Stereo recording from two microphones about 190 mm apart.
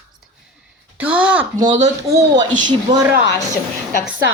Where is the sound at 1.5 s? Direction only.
20° right (ahead or behind).